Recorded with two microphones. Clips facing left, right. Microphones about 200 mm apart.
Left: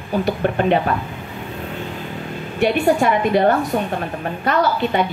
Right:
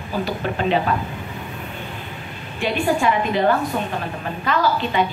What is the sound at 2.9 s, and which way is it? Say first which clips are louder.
Speech: left 3 dB; 45° left (ahead or behind).